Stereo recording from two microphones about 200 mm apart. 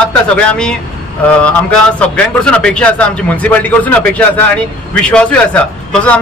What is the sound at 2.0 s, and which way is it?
A man's voice, 5° left (ahead or behind).